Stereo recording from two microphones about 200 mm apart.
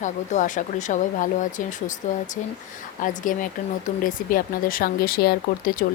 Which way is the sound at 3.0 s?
40° left (ahead or behind).